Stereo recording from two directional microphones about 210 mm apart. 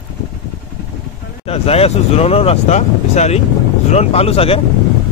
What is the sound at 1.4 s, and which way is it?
Speech, 30° left (ahead or behind).